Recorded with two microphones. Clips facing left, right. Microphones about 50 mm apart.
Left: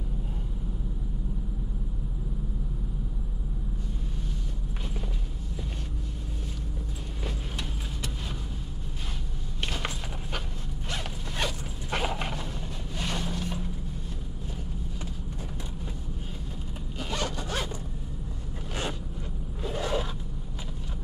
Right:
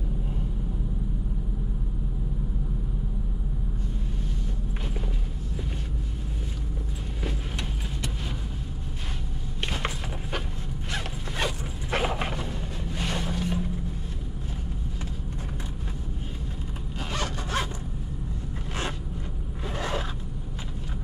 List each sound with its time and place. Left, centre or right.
7.2 s vehicle: centre
9.7 s a sound: centre
11.3 s vehicle: centre
19.7 s scrape: right